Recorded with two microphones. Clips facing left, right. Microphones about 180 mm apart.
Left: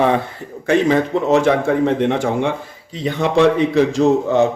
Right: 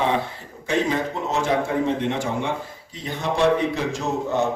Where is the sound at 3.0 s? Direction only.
90° left.